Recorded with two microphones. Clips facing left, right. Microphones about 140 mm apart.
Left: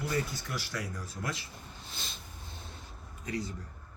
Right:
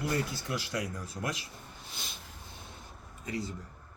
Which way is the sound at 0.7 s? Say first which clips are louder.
Right 3 dB; 15° right (ahead or behind).